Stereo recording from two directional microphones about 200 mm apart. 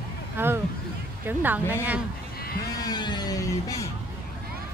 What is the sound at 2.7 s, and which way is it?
Speech, 20° left (ahead or behind).